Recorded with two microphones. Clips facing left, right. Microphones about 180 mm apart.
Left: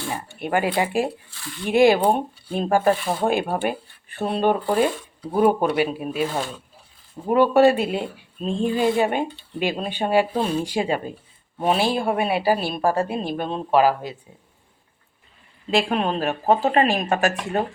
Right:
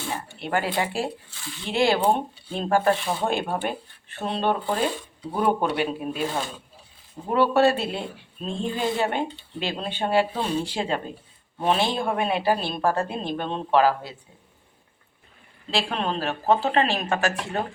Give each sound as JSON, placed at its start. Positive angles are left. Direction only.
{"t": 0.3, "sound": "speech", "side_deg": 15}
{"t": 7.3, "sound": "speech", "side_deg": 15}
{"t": 15.7, "sound": "speech", "side_deg": 15}